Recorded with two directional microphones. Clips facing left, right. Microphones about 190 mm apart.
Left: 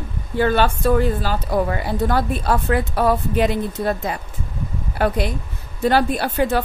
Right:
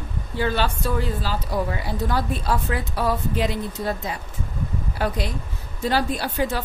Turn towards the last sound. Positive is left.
turn(degrees=60)  # may be behind; listen again after turning